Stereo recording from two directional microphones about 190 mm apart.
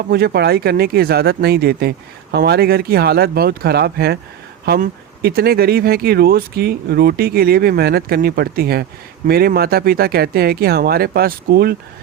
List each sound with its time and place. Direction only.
0.1 s speech: 55° right (ahead or behind)